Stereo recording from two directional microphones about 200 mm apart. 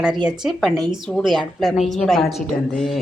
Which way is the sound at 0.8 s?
20° right (ahead or behind).